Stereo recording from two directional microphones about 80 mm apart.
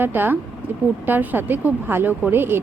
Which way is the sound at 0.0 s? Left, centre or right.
Right.